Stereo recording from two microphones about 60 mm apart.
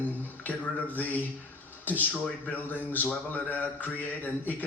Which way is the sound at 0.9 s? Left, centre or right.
Left.